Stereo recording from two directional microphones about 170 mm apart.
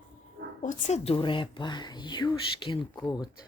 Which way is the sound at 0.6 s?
40° left (ahead or behind).